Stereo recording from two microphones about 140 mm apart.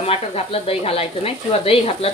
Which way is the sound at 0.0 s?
45° left (ahead or behind).